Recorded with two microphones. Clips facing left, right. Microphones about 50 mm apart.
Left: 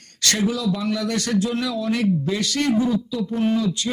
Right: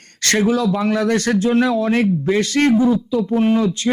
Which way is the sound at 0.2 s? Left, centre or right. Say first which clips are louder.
Right 6 dB; right.